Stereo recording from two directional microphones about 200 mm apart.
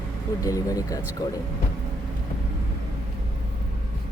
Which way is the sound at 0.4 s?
15° left (ahead or behind).